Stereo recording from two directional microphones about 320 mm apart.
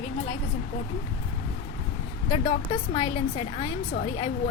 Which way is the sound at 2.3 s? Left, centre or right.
Centre.